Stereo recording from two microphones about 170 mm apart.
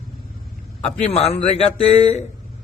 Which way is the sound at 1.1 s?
40° left (ahead or behind).